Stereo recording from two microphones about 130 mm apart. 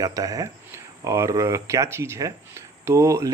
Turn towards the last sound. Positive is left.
turn(degrees=-25)  # may be behind; listen again after turning